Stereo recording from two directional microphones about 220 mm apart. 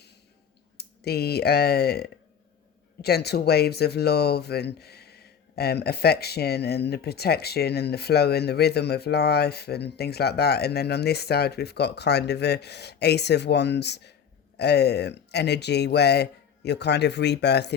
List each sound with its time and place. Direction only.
0.8 s speech: 45° left (ahead or behind)